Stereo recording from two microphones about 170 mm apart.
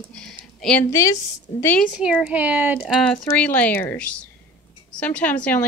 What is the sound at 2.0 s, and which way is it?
Speech, 5° right (ahead or behind).